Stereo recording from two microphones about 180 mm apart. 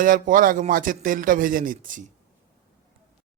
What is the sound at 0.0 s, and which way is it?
Speech, 50° right (ahead or behind).